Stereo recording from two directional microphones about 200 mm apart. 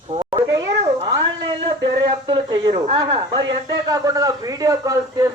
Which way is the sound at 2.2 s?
25° right (ahead or behind).